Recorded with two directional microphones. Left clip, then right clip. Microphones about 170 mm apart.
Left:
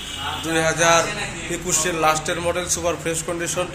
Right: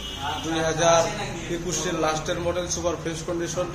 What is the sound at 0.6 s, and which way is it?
A man's voice, 25° left (ahead or behind).